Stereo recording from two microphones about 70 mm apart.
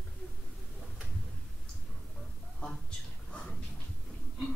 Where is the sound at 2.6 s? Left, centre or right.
Centre.